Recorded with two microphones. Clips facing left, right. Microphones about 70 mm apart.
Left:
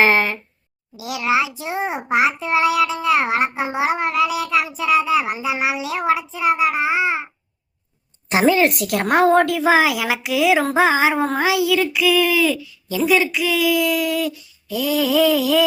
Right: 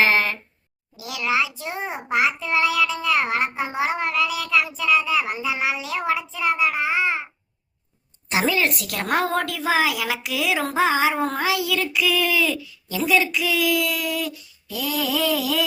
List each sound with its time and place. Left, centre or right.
0.0 s a sound: centre
0.9 s a child's voice: left
8.3 s a woman's voice: centre